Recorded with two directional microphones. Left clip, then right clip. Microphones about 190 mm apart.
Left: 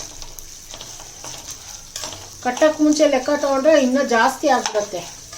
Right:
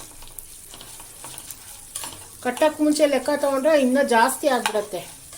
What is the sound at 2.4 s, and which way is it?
Speech, 35° right (ahead or behind).